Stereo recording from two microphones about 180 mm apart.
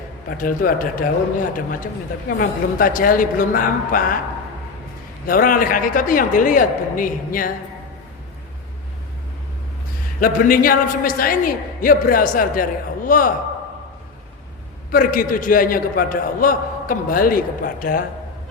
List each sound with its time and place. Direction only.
0.3 s a man's voice: 50° left (ahead or behind)
5.2 s a man's voice: 50° left (ahead or behind)
10.2 s a man's voice: 50° left (ahead or behind)
14.9 s a man's voice: 50° left (ahead or behind)